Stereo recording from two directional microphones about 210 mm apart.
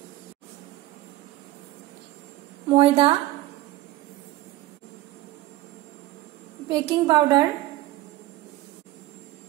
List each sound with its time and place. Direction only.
2.7 s a woman's voice: 25° right (ahead or behind)
6.7 s a woman's voice: 20° right (ahead or behind)